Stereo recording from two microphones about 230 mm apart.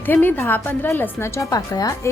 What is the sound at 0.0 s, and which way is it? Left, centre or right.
Speech, centre.